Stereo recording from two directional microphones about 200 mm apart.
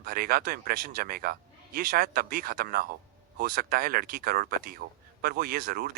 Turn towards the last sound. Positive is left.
turn(degrees=-45)  # may be behind; listen again after turning